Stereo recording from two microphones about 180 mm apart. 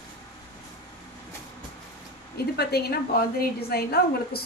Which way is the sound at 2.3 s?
60° left (ahead or behind).